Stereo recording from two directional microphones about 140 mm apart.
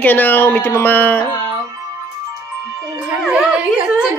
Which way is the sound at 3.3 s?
10° right (ahead or behind).